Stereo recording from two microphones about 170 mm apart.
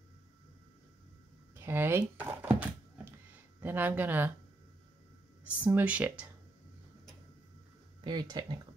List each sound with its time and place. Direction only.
1.5 s speech: 15° right (ahead or behind)
3.6 s speech: 10° right (ahead or behind)
5.4 s speech: 10° right (ahead or behind)
8.0 s speech: 25° right (ahead or behind)